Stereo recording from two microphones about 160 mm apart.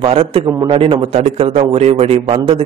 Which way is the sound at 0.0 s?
35° right (ahead or behind).